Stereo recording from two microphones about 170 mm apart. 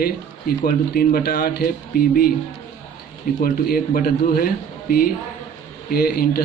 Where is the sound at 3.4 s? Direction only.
60° left (ahead or behind).